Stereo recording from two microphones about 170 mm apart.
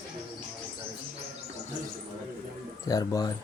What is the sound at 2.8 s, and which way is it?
Speech, 20° left (ahead or behind).